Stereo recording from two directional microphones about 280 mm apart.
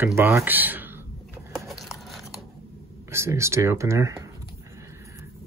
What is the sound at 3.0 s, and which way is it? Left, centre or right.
Speech, centre.